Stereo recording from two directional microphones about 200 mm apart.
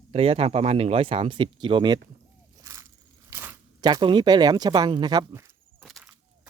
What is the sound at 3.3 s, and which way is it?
Speech, 10° right (ahead or behind).